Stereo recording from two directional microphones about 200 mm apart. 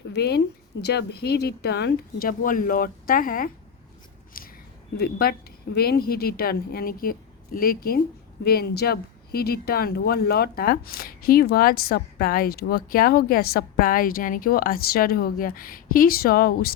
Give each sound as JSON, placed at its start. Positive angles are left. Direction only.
{"t": 0.1, "sound": "speech", "side_deg": 55}